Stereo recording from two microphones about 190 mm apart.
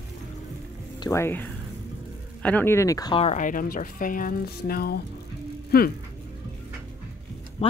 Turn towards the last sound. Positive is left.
turn(degrees=35)  # may be behind; listen again after turning